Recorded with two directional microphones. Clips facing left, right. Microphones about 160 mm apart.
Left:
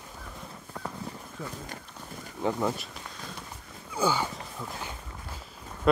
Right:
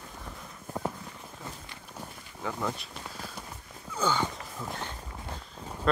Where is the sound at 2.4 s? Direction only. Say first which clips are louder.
Left 7 dB; 25° left (ahead or behind).